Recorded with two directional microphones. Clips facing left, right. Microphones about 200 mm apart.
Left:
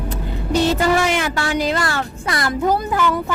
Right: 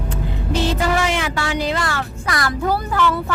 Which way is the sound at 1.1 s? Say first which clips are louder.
Left 2 dB; 45° left (ahead or behind).